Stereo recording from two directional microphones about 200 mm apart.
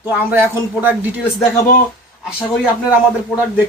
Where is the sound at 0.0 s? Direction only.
10° right (ahead or behind).